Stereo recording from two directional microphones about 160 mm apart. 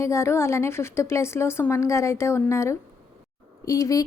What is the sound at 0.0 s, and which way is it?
A woman's voice, 15° left (ahead or behind).